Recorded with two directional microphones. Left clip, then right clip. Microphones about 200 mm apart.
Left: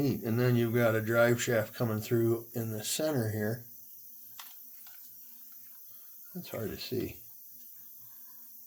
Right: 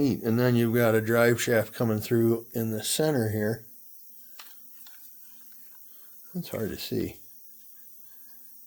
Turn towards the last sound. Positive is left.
turn(degrees=-50)  # may be behind; listen again after turning